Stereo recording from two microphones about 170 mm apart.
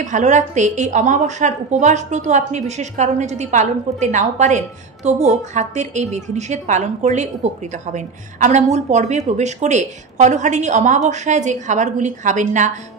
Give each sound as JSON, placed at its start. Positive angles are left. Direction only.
{"t": 0.0, "sound": "a woman's voice", "side_deg": -45}